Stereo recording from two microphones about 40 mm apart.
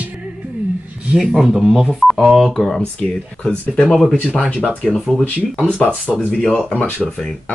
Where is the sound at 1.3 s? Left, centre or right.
Centre.